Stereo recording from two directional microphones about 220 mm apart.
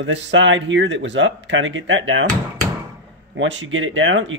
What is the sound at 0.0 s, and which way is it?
Speech, 55° right (ahead or behind).